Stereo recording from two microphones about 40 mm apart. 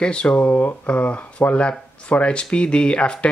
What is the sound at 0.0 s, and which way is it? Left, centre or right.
Speech, left.